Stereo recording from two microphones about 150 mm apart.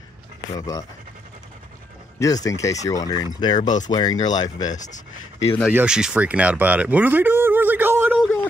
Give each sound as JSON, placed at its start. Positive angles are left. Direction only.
{"t": 0.6, "sound": "speech", "side_deg": 25}
{"t": 2.1, "sound": "speech", "side_deg": 20}
{"t": 5.7, "sound": "speech", "side_deg": -10}